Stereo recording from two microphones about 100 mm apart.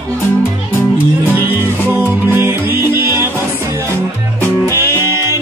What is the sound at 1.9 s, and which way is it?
Music, 25° right (ahead or behind).